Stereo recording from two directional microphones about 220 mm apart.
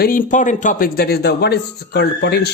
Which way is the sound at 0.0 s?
40° left (ahead or behind).